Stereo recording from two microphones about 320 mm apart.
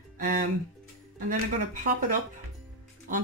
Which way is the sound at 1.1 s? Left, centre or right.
Right.